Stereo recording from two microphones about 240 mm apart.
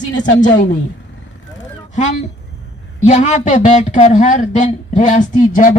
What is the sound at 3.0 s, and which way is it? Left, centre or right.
Speech, left.